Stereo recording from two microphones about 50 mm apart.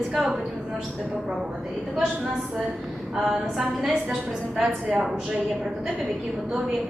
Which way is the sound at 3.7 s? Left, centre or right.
Centre.